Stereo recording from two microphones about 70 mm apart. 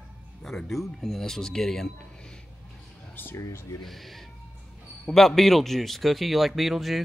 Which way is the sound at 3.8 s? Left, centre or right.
Centre.